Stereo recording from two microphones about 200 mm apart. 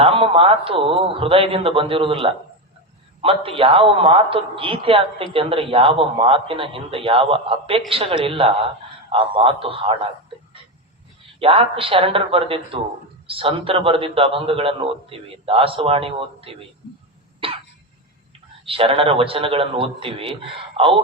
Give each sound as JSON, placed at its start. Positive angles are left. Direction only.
{"t": 0.0, "sound": "a man's voice", "side_deg": -25}
{"t": 11.3, "sound": "a man's voice", "side_deg": -30}
{"t": 17.4, "sound": "cough", "side_deg": -25}
{"t": 18.6, "sound": "a man's voice", "side_deg": -25}